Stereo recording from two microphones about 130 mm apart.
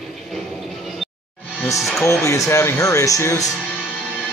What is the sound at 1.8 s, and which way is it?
Speech, centre (ahead or behind).